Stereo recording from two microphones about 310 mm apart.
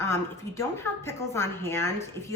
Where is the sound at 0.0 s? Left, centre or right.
Centre.